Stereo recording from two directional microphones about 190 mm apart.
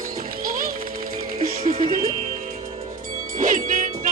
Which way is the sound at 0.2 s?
50° right (ahead or behind).